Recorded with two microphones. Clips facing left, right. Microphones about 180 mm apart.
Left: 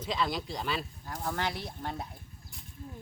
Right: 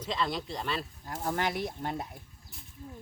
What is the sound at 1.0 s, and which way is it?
Speech, 20° right (ahead or behind).